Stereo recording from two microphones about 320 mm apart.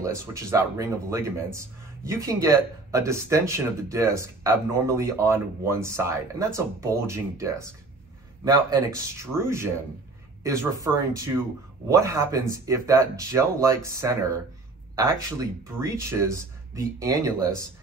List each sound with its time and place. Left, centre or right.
0.0 s speech: centre